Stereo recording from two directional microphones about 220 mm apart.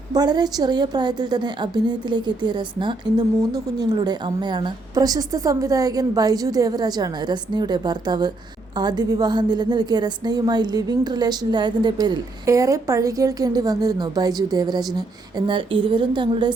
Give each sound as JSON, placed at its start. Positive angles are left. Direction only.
{"t": 0.1, "sound": "a woman's voice", "side_deg": -20}